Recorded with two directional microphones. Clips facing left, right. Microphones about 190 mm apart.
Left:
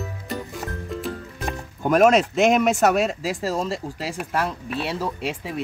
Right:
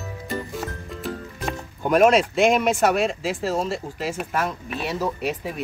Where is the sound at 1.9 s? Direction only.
45° left (ahead or behind).